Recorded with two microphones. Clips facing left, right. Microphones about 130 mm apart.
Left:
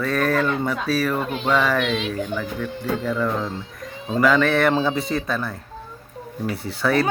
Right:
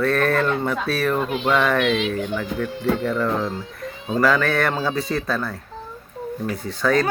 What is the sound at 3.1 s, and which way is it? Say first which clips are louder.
Speech: right 1 dB; centre (ahead or behind).